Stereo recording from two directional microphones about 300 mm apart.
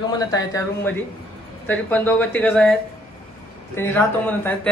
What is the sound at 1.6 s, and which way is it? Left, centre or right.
Speech, centre.